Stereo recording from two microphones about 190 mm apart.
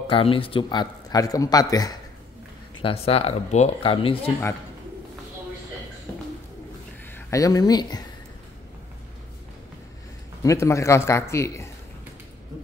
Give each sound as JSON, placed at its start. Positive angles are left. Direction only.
{"t": 0.1, "sound": "a man's voice", "side_deg": 30}
{"t": 2.8, "sound": "speech", "side_deg": 30}
{"t": 7.2, "sound": "speech", "side_deg": 15}
{"t": 10.4, "sound": "a man's voice", "side_deg": 15}